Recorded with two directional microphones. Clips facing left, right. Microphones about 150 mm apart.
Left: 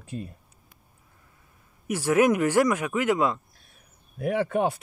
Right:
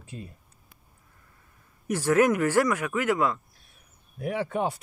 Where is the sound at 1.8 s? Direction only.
10° left (ahead or behind).